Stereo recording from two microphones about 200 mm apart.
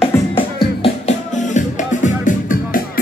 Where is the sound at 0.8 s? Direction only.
35° left (ahead or behind).